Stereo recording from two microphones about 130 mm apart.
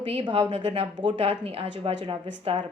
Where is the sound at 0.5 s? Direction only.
55° right (ahead or behind).